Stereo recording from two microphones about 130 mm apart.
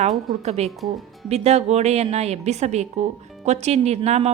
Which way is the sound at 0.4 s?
55° right (ahead or behind).